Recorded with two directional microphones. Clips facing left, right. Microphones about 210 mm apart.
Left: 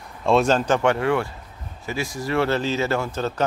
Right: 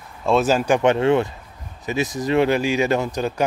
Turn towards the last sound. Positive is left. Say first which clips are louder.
# right 2 dB
turn(degrees=-15)  # may be behind; listen again after turning